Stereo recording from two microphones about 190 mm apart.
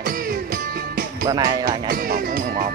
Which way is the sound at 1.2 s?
20° right (ahead or behind).